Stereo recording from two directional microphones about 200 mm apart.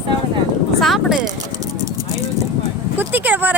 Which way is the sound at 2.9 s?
10° right (ahead or behind).